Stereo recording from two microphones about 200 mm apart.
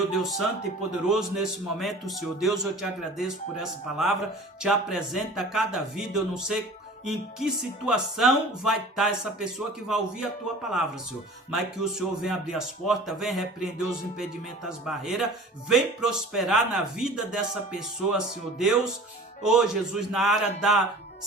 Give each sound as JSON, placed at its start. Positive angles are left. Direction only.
{"t": 0.1, "sound": "a man's voice", "side_deg": 0}
{"t": 14.8, "sound": "a man's voice", "side_deg": 0}
{"t": 19.4, "sound": "a man's voice", "side_deg": -5}